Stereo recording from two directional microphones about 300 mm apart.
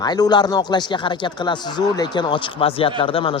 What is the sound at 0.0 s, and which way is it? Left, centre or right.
A man's voice, centre.